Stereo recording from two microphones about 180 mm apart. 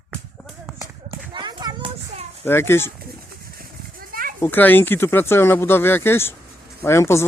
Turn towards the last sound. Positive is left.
turn(degrees=15)  # may be behind; listen again after turning